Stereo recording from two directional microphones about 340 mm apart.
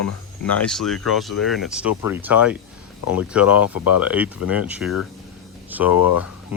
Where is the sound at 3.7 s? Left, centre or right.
Left.